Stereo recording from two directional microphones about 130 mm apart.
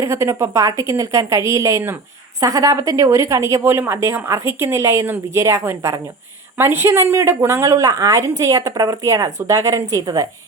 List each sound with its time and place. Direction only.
0.0 s a woman's voice: 20° right (ahead or behind)